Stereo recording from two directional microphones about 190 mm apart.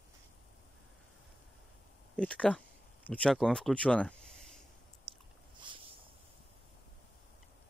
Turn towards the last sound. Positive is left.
turn(degrees=-25)  # may be behind; listen again after turning